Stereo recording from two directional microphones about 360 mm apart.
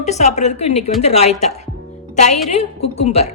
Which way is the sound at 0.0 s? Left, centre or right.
Centre.